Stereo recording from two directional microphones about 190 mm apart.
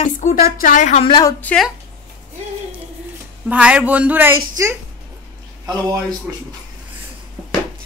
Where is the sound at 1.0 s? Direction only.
25° left (ahead or behind).